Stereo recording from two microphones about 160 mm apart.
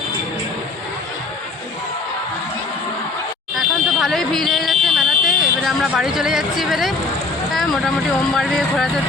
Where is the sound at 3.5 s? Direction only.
Centre (ahead or behind).